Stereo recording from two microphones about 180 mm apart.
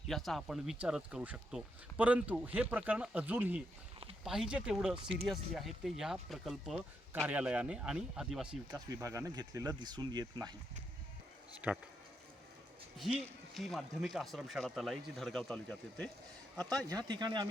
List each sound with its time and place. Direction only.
0.1 s speech: centre (ahead or behind)
9.0 s speech: 15° right (ahead or behind)
11.6 s speech: 5° right (ahead or behind)
13.5 s speech: centre (ahead or behind)
17.1 s speech: 25° right (ahead or behind)